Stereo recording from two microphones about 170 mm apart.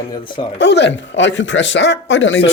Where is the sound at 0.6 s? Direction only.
90° left.